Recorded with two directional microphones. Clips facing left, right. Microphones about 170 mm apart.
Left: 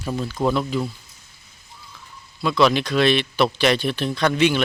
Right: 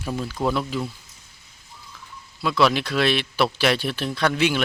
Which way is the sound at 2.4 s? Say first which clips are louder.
Left 2 dB; 5° right (ahead or behind).